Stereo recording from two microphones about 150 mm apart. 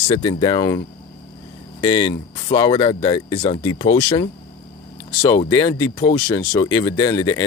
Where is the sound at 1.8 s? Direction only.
35° left (ahead or behind).